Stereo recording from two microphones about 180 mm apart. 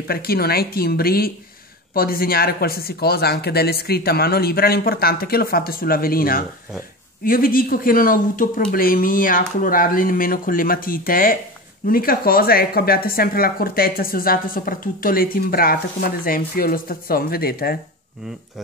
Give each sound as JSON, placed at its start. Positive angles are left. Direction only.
{"t": 0.1, "sound": "a woman's voice", "side_deg": 60}